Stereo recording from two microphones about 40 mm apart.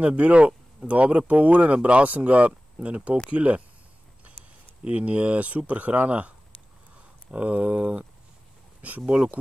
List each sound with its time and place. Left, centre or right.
0.0 s speech: right
4.8 s speech: right